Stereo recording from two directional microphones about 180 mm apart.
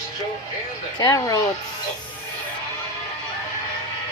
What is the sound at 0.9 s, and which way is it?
Speech, 20° left (ahead or behind).